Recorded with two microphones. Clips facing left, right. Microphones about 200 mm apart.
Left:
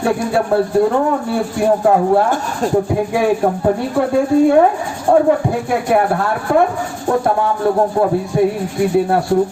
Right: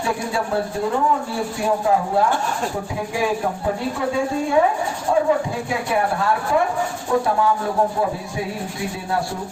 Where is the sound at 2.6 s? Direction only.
40° left (ahead or behind).